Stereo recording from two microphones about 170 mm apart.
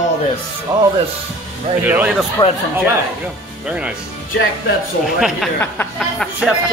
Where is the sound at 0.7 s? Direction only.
15° right (ahead or behind).